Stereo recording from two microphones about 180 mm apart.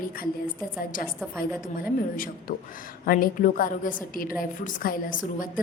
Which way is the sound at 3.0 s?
50° left (ahead or behind).